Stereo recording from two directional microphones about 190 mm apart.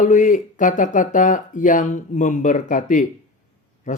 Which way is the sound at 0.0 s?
40° left (ahead or behind).